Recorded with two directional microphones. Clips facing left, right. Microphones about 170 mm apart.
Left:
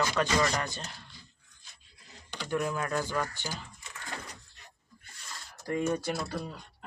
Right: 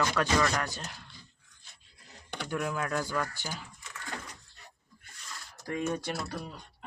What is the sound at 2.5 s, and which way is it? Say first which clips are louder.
Speech: left 2 dB; 5° right (ahead or behind).